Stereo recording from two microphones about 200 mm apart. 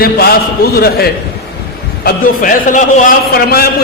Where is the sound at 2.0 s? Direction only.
40° left (ahead or behind).